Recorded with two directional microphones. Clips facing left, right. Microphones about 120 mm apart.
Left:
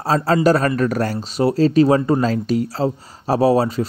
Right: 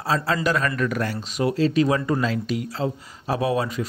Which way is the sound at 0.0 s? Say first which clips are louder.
Left 7 dB; 40° left (ahead or behind).